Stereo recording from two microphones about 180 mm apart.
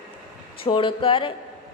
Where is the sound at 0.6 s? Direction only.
30° left (ahead or behind).